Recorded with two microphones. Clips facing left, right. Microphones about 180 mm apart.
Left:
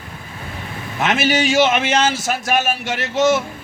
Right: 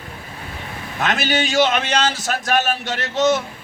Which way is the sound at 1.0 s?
20° left (ahead or behind).